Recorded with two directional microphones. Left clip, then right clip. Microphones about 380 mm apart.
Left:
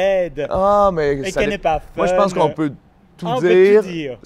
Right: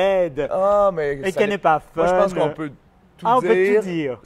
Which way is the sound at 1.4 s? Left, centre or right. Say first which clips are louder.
Right 2 dB; right.